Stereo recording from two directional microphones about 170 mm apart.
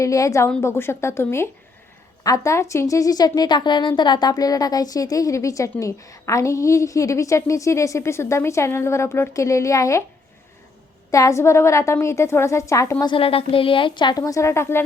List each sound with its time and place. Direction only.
0.0 s a woman's voice: 20° left (ahead or behind)
11.1 s a woman's voice: 20° left (ahead or behind)